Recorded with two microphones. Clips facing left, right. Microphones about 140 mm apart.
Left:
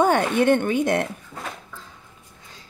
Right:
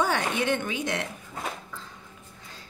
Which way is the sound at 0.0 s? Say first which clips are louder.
Left 8 dB; 55° left (ahead or behind).